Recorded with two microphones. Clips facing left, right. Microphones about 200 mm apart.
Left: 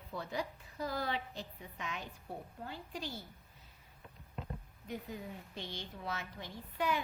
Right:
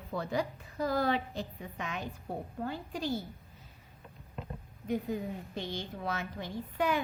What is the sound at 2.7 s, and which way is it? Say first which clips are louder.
Speech: right 6 dB; 50° right (ahead or behind).